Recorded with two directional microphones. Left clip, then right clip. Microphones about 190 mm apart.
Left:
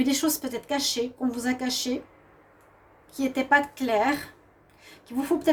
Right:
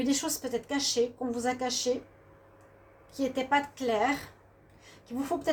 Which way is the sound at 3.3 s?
50° left (ahead or behind).